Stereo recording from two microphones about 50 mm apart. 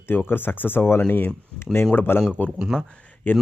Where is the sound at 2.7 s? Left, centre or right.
Centre.